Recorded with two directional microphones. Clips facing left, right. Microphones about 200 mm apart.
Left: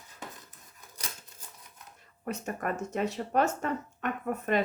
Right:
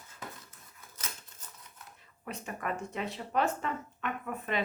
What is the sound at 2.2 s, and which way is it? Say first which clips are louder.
Speech: left 4 dB; 45° left (ahead or behind).